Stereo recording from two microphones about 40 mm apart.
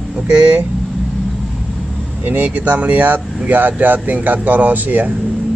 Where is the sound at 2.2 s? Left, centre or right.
Right.